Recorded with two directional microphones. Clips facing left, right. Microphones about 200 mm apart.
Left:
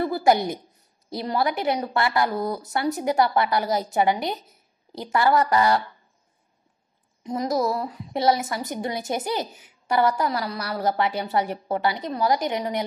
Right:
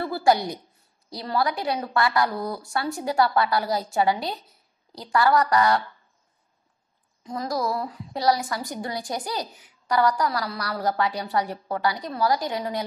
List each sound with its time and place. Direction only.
0.0 s a sound: 20° left (ahead or behind)
1.1 s a woman's voice: 20° left (ahead or behind)
7.2 s a woman's voice: 20° left (ahead or behind)